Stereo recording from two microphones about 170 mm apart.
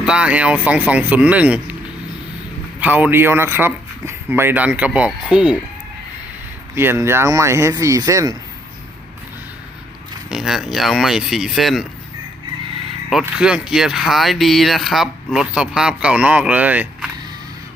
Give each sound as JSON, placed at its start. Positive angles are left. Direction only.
{"t": 0.0, "sound": "speech", "side_deg": -5}
{"t": 2.8, "sound": "speech", "side_deg": -10}
{"t": 6.7, "sound": "speech", "side_deg": -15}
{"t": 10.2, "sound": "speech", "side_deg": -5}
{"t": 13.1, "sound": "speech", "side_deg": -5}